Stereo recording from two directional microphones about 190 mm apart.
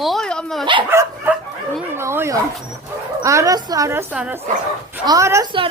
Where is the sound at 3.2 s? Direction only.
15° right (ahead or behind).